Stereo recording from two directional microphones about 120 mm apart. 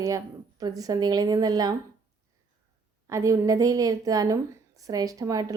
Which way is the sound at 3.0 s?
25° right (ahead or behind).